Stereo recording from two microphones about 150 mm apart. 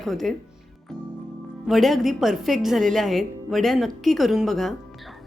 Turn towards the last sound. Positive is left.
turn(degrees=0)  # may be behind; listen again after turning